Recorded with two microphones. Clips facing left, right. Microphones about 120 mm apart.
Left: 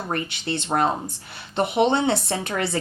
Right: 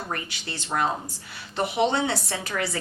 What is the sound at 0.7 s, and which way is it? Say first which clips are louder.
Speech: left 4 dB; 35° left (ahead or behind).